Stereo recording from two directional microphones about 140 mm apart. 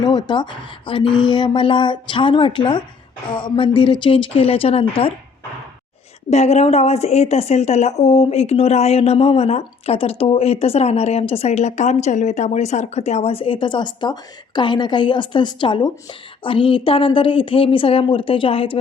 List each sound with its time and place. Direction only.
0.0 s a woman's voice: 30° left (ahead or behind)
6.3 s a woman's voice: 50° left (ahead or behind)